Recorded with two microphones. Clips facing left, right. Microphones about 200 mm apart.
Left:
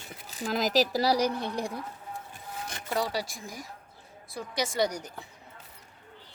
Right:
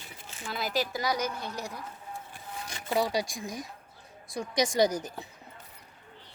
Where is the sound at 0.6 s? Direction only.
80° left.